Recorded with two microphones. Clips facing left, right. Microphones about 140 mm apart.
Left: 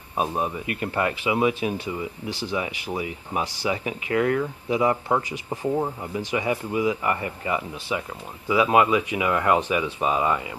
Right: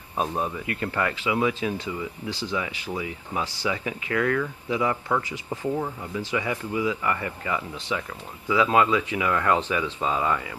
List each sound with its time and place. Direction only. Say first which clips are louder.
0.2 s speech: left 1 dB; 15° left (ahead or behind)
4.1 s speech: left 2 dB; 25° left (ahead or behind)